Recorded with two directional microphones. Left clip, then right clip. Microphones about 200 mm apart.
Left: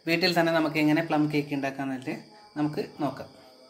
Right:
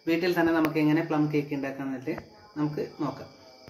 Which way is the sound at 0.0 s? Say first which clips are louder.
Left 1 dB; 55° left (ahead or behind).